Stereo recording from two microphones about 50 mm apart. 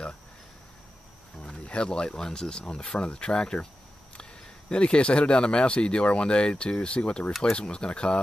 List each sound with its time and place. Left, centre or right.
1.7 s speech: centre